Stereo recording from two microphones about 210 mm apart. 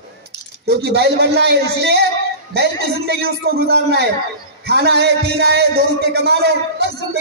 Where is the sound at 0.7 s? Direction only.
50° right (ahead or behind).